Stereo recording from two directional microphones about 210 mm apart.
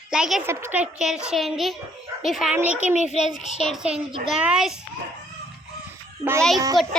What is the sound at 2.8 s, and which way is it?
Speech, 35° left (ahead or behind).